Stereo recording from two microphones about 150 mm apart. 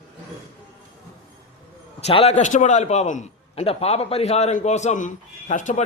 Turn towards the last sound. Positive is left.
turn(degrees=55)  # may be behind; listen again after turning